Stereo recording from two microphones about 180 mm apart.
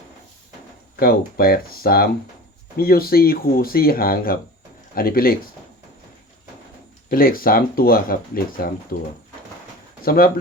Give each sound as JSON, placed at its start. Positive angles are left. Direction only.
{"t": 0.9, "sound": "speech", "side_deg": 55}
{"t": 7.1, "sound": "speech", "side_deg": 55}